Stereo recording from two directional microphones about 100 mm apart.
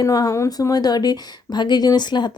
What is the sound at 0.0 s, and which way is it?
Speech, 40° left (ahead or behind).